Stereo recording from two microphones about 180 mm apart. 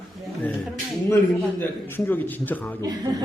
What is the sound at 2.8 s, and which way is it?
Speech, 20° right (ahead or behind).